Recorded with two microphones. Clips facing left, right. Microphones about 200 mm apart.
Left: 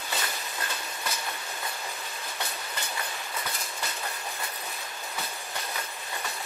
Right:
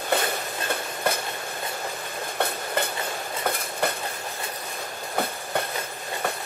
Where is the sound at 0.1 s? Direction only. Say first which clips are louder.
Right 10 dB; 55° right (ahead or behind).